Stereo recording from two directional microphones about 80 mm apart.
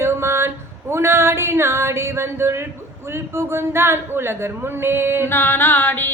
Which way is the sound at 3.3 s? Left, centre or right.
Right.